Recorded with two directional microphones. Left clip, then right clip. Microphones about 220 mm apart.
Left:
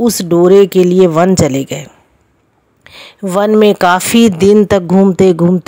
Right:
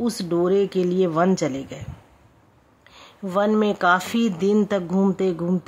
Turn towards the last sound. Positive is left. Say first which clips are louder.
# left 14 dB
turn(degrees=35)  # may be behind; listen again after turning